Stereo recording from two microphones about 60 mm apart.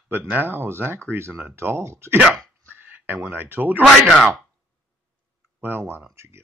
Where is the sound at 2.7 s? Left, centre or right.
Right.